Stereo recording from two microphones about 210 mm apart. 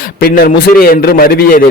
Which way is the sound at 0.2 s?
45° left (ahead or behind).